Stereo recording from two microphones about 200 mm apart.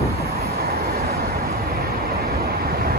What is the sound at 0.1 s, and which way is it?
Vehicle, 50° right (ahead or behind).